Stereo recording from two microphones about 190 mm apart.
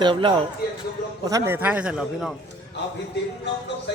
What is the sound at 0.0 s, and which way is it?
Speech, 25° right (ahead or behind).